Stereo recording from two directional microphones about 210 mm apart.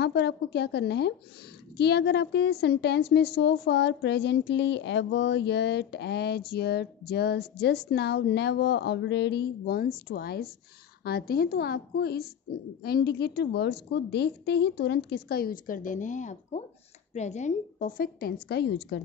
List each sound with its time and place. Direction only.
0.0 s a woman's voice: 55° left (ahead or behind)